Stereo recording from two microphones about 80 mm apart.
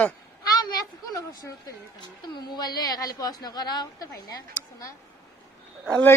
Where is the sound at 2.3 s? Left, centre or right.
Left.